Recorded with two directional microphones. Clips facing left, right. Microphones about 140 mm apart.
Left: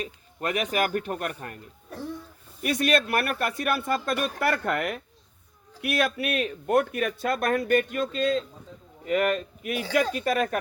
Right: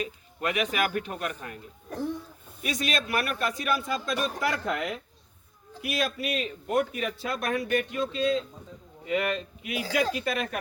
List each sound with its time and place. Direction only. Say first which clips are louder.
0.0 s speech: even; 40° left (ahead or behind)
2.6 s speech: left 6 dB; 55° left (ahead or behind); by 10.6 s 40° left (ahead or behind)